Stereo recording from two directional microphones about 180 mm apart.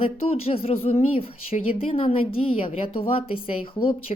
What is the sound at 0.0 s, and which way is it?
A woman's voice, 35° left (ahead or behind).